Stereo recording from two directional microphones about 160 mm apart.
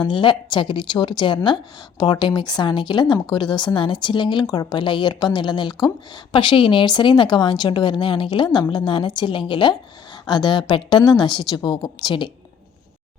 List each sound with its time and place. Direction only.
0.0 s a woman's voice: 30° left (ahead or behind)